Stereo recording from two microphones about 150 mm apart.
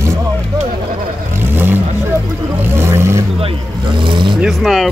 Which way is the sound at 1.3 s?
15° right (ahead or behind).